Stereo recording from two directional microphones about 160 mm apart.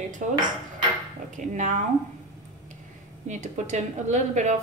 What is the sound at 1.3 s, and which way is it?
Speech, 50° right (ahead or behind).